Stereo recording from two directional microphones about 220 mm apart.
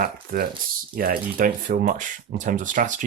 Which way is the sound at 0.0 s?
40° right (ahead or behind).